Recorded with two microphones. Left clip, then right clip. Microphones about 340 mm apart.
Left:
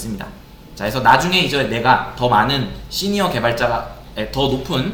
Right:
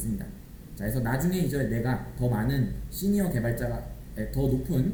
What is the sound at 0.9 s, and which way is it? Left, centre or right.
Speech, left.